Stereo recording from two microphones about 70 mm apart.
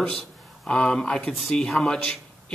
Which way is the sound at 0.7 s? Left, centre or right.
Centre.